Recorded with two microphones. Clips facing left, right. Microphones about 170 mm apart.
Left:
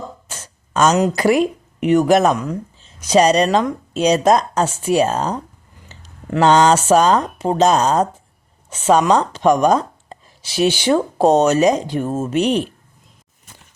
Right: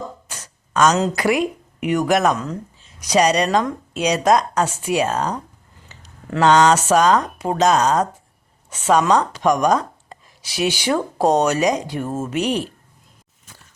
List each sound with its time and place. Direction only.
0.3 s a sound: 25° left (ahead or behind)
1.1 s speech: 30° left (ahead or behind)
6.4 s speech: 30° left (ahead or behind)